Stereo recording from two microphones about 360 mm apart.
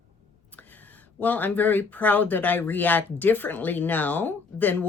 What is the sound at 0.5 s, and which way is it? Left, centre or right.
Speech, centre.